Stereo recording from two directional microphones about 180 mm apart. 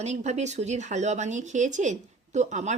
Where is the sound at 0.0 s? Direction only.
40° right (ahead or behind).